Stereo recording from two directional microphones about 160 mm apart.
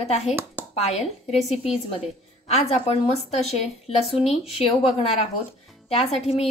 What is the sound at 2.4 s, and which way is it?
A woman's voice, 40° left (ahead or behind).